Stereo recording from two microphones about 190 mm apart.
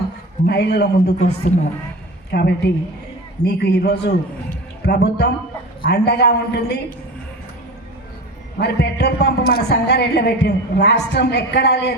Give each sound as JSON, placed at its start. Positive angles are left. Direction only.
{"t": 0.4, "sound": "a woman's voice", "side_deg": 60}
{"t": 1.2, "sound": "a woman's voice", "side_deg": 35}
{"t": 2.3, "sound": "a woman's voice", "side_deg": 60}
{"t": 4.4, "sound": "a sound", "side_deg": 60}
{"t": 5.8, "sound": "a woman's voice", "side_deg": 60}
{"t": 8.6, "sound": "a woman's voice", "side_deg": 60}